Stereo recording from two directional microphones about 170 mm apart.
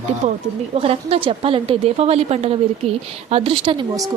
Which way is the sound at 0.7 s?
35° right (ahead or behind).